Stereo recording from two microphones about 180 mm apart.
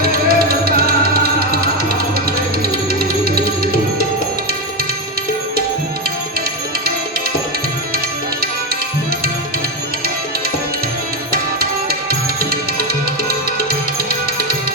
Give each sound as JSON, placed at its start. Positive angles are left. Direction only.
{"t": 0.3, "sound": "music", "side_deg": -55}
{"t": 11.3, "sound": "music", "side_deg": -55}